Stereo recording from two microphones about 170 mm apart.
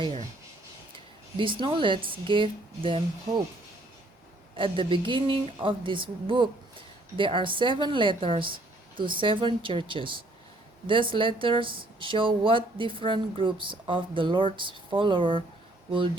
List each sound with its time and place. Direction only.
0.9 s speech: 30° right (ahead or behind)
4.5 s speech: 30° right (ahead or behind)